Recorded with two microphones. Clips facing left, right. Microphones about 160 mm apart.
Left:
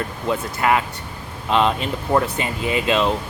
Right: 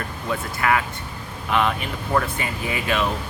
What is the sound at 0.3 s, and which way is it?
Speech, 25° left (ahead or behind).